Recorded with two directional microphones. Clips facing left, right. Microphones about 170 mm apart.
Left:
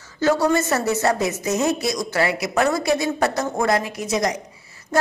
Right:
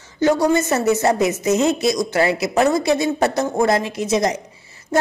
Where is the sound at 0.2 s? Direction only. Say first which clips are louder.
Right 2 dB; 15° right (ahead or behind).